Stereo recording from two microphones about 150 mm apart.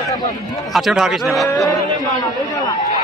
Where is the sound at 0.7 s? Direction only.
Centre (ahead or behind).